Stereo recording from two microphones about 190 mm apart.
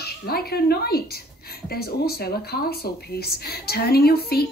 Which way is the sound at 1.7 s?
55° left (ahead or behind).